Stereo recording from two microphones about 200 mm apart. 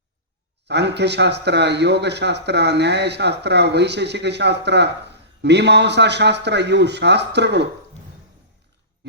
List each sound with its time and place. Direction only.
0.7 s speech: 60° right (ahead or behind)